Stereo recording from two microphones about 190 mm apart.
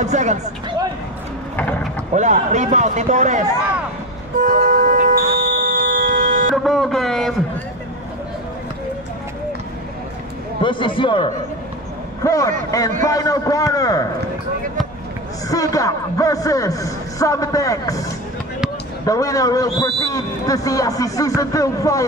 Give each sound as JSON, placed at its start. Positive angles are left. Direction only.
{"t": 0.0, "sound": "a man's voice", "side_deg": -40}
{"t": 2.1, "sound": "a man's voice", "side_deg": -40}
{"t": 4.4, "sound": "music", "side_deg": -45}
{"t": 6.5, "sound": "a sound", "side_deg": 0}
{"t": 10.6, "sound": "a man's voice", "side_deg": 25}
{"t": 15.4, "sound": "speech", "side_deg": 20}
{"t": 19.0, "sound": "a man's voice", "side_deg": 20}